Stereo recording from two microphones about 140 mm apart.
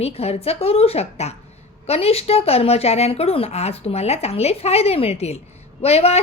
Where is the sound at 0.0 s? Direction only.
45° left (ahead or behind).